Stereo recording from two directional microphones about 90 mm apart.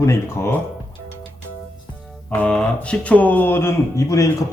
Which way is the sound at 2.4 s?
10° left (ahead or behind).